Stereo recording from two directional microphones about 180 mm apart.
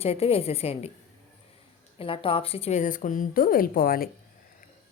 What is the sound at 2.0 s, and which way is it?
A woman's voice, 30° left (ahead or behind).